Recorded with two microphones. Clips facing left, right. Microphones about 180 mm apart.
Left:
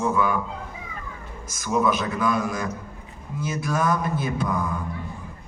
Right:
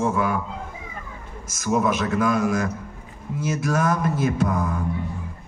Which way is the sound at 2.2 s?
45° right (ahead or behind).